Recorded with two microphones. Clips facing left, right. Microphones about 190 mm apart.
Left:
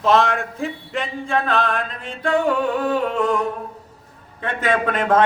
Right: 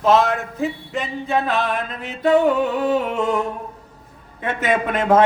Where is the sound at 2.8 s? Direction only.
20° right (ahead or behind).